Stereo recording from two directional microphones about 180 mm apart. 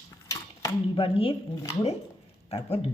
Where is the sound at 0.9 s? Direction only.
30° left (ahead or behind).